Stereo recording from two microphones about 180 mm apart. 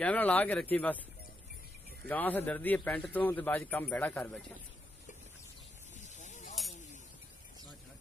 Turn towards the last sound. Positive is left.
turn(degrees=40)  # may be behind; listen again after turning